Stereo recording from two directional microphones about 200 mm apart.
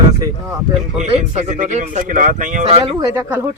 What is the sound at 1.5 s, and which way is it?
Speech, 40° right (ahead or behind).